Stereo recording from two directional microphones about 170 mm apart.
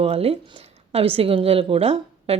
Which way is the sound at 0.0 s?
35° right (ahead or behind).